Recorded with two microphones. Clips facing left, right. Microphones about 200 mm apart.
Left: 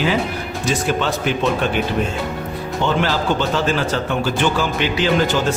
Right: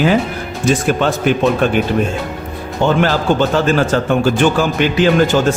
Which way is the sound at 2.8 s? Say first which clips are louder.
Right 5 dB; 50° right (ahead or behind).